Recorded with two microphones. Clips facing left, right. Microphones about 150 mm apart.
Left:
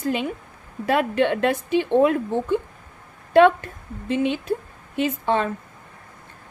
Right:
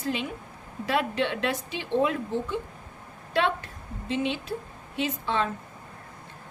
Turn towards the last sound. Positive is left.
turn(degrees=50)  # may be behind; listen again after turning